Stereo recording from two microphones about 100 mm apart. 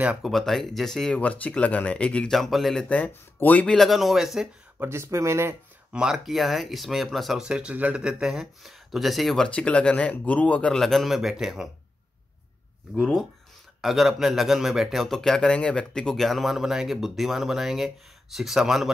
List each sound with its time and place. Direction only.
0.2 s speech: centre (ahead or behind)
3.0 s speech: 20° left (ahead or behind)
3.7 s speech: centre (ahead or behind)
4.7 s speech: 25° right (ahead or behind)
5.9 s speech: 5° right (ahead or behind)
13.7 s speech: 5° right (ahead or behind)